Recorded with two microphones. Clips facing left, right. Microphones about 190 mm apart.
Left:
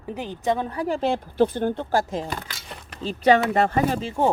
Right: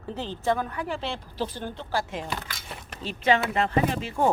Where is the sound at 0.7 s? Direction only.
40° left (ahead or behind).